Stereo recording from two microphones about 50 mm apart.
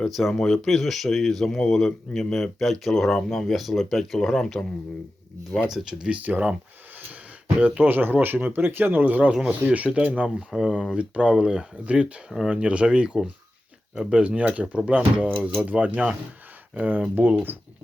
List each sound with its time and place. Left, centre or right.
0.1 s speech: centre
5.5 s speech: centre
6.1 s speech: right
7.6 s speech: right
10.2 s speech: centre
10.9 s speech: right
11.3 s speech: centre
11.9 s speech: right